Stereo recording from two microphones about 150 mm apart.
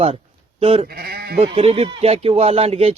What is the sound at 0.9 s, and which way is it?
Sheep, 90° right.